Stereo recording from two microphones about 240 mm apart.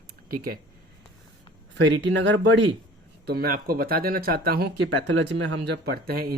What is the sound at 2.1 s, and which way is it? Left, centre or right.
Speech, right.